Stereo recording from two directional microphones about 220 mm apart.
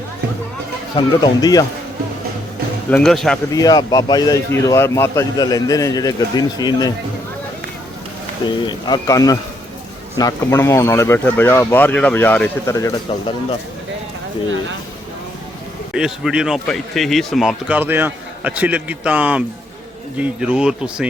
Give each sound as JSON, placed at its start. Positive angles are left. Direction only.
{"t": 0.9, "sound": "speech", "side_deg": 20}
{"t": 2.9, "sound": "speech", "side_deg": 0}
{"t": 3.5, "sound": "speech", "side_deg": 15}
{"t": 8.4, "sound": "speech", "side_deg": 20}
{"t": 15.9, "sound": "speech", "side_deg": 0}